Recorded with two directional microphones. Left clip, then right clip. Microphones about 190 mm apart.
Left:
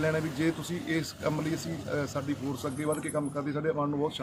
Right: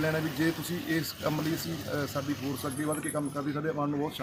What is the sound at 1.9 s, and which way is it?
Speech, 10° left (ahead or behind).